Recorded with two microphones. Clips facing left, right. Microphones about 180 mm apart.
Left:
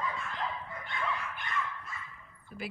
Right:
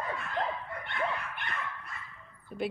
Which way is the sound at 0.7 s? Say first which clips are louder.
Right 2 dB; 65° right (ahead or behind).